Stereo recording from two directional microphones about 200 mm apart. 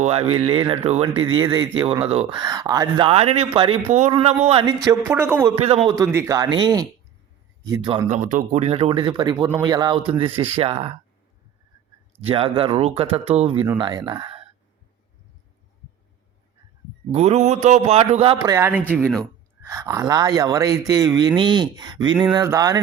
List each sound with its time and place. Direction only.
0.0 s a man's voice: 30° right (ahead or behind); by 5.5 s 15° right (ahead or behind)
5.6 s speech: 30° right (ahead or behind)
6.0 s speech: 15° right (ahead or behind)
8.0 s speech: 35° right (ahead or behind)
12.2 s speech: 25° right (ahead or behind)
17.1 s a man's voice: 30° right (ahead or behind)
18.5 s speech: 10° right (ahead or behind)
19.0 s speech: 5° left (ahead or behind)
19.6 s speech: 15° right (ahead or behind)